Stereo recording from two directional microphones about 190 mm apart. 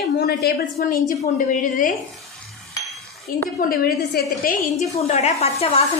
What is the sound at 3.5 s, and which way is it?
A woman's voice, 50° left (ahead or behind).